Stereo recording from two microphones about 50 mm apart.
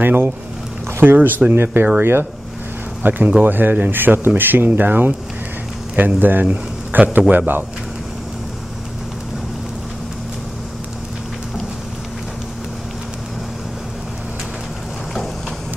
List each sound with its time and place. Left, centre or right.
0.0 s a man's voice: right
3.0 s a man's voice: right